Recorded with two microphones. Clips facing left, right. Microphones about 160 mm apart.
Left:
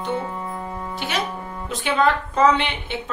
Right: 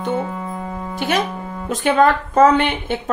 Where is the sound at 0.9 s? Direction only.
50° right (ahead or behind).